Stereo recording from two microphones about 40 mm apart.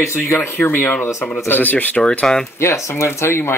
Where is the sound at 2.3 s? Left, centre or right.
Centre.